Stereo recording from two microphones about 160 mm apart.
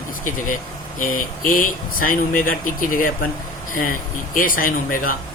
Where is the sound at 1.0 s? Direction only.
55° left (ahead or behind).